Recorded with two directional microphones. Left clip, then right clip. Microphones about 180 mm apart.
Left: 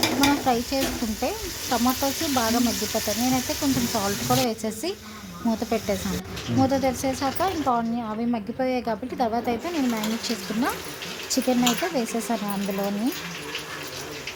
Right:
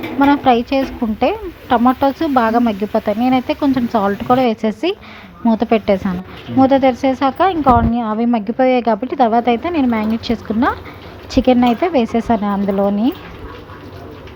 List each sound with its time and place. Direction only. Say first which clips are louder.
0.3 s speech: right 10 dB; 25° right (ahead or behind)